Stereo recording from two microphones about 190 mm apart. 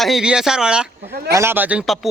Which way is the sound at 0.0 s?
Centre (ahead or behind).